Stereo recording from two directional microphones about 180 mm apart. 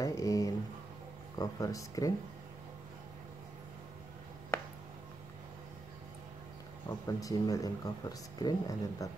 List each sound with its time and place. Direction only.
0.0 s a sound: 20° left (ahead or behind)
1.4 s speech: 20° left (ahead or behind)
7.1 s speech: 20° left (ahead or behind)